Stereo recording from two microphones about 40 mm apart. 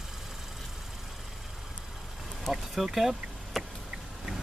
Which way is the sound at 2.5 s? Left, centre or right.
Centre.